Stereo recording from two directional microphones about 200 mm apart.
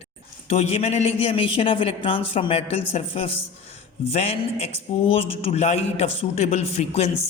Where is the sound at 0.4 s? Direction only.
30° left (ahead or behind).